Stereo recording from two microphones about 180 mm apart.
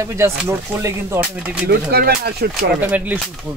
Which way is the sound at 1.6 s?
60° right (ahead or behind).